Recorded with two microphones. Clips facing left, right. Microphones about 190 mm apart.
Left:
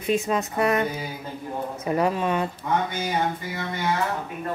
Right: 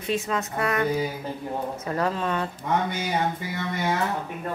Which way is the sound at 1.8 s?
15° left (ahead or behind).